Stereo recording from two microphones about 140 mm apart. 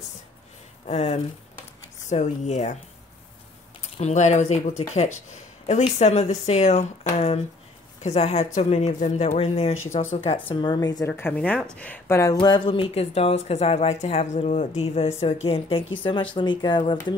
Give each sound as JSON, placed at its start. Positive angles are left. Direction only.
{"t": 0.8, "sound": "speech", "side_deg": 50}
{"t": 4.0, "sound": "speech", "side_deg": 60}
{"t": 12.4, "sound": "speech", "side_deg": 35}